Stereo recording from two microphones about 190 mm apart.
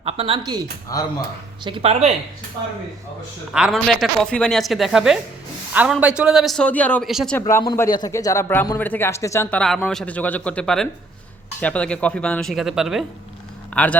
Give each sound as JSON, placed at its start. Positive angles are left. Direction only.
{"t": 0.0, "sound": "a woman's voice", "side_deg": -30}
{"t": 0.9, "sound": "speech", "side_deg": 20}
{"t": 1.6, "sound": "speech", "side_deg": -30}
{"t": 3.5, "sound": "a woman's voice", "side_deg": 0}
{"t": 7.3, "sound": "a woman's voice", "side_deg": 15}